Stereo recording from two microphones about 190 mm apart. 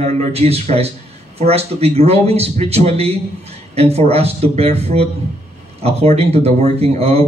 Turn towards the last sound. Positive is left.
turn(degrees=-30)  # may be behind; listen again after turning